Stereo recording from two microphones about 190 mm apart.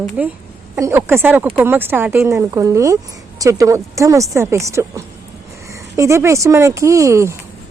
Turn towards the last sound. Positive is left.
turn(degrees=-15)  # may be behind; listen again after turning